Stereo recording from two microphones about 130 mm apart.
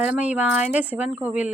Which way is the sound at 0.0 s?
10° right (ahead or behind).